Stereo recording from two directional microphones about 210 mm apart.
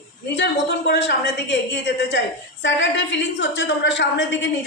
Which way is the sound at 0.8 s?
55° left (ahead or behind).